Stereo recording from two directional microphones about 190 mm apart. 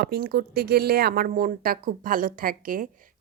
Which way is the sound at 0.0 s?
55° right (ahead or behind).